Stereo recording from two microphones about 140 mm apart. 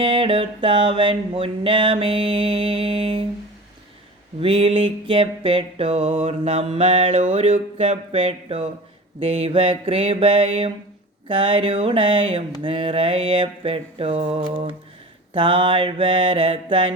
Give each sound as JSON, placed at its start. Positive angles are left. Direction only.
{"t": 0.0, "sound": "music", "side_deg": -40}
{"t": 4.4, "sound": "a sound", "side_deg": -40}
{"t": 9.2, "sound": "music", "side_deg": -45}